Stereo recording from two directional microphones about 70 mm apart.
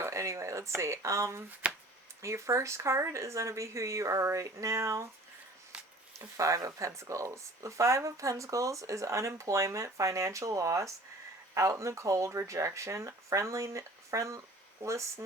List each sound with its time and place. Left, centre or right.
0.0 s speech: right
5.7 s a sound: centre
6.1 s speech: right